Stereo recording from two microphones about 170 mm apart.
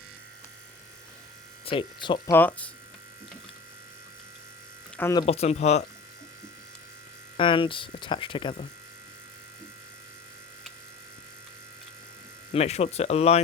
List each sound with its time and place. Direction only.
1.6 s speech: 30° left (ahead or behind)
2.3 s speech: 10° left (ahead or behind)
4.9 s speech: 15° left (ahead or behind)
5.2 s speech: 35° left (ahead or behind)
7.3 s speech: 30° left (ahead or behind)
12.5 s speech: 40° left (ahead or behind)